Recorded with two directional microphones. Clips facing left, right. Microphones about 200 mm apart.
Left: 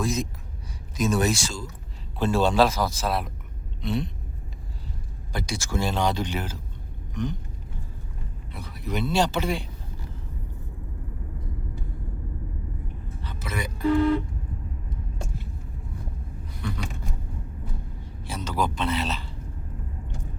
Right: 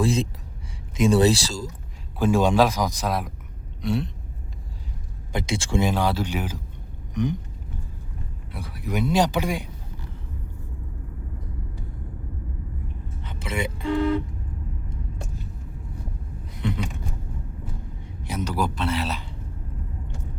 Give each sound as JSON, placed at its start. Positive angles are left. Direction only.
{"t": 0.0, "sound": "a sound", "side_deg": -30}
{"t": 0.9, "sound": "speech", "side_deg": -30}
{"t": 2.1, "sound": "speech", "side_deg": -10}
{"t": 5.3, "sound": "speech", "side_deg": -20}
{"t": 5.8, "sound": "speech", "side_deg": -5}
{"t": 7.1, "sound": "a sound", "side_deg": -15}
{"t": 8.5, "sound": "speech", "side_deg": -10}
{"t": 13.2, "sound": "vehicle", "side_deg": -25}
{"t": 16.6, "sound": "scissors", "side_deg": -20}
{"t": 18.3, "sound": "speech", "side_deg": -15}